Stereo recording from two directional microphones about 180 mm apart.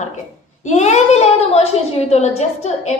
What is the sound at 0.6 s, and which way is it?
A woman's voice, 40° left (ahead or behind).